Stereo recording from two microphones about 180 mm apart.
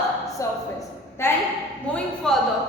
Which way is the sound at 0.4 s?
20° left (ahead or behind).